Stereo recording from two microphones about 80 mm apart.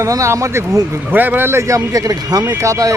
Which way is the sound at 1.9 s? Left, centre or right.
Right.